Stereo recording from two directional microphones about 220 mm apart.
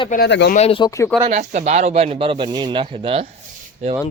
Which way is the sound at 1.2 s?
30° right (ahead or behind).